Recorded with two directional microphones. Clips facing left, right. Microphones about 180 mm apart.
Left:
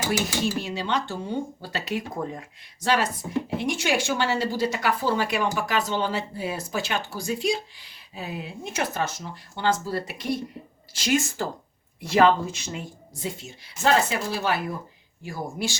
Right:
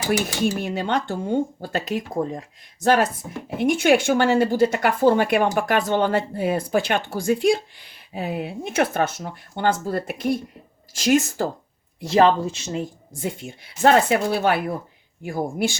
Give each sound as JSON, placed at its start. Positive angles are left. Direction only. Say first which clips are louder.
{"t": 0.6, "sound": "a woman's voice", "louder": "right 4 dB", "side_deg": -55}
{"t": 2.8, "sound": "a woman's voice", "louder": "right 5 dB", "side_deg": -50}
{"t": 11.9, "sound": "speech", "louder": "right 2 dB", "side_deg": -30}
{"t": 13.2, "sound": "speech", "louder": "right 4 dB", "side_deg": -55}